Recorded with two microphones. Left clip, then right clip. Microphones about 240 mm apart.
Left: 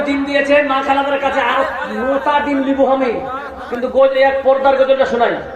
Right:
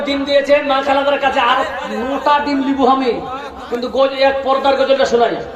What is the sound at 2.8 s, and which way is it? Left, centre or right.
Speech, right.